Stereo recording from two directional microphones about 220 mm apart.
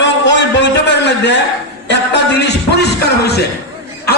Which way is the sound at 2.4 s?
50° left (ahead or behind).